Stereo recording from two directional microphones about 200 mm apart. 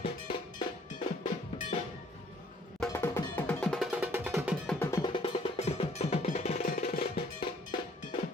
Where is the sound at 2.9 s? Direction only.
10° left (ahead or behind).